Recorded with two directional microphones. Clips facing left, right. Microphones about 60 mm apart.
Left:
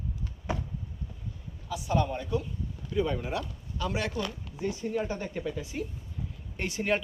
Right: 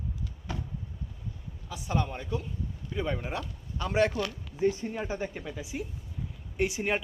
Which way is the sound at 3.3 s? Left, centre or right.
Right.